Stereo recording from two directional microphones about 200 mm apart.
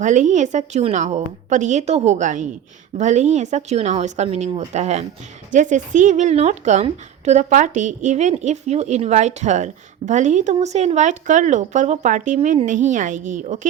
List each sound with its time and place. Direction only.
0.0 s a woman's voice: 35° right (ahead or behind)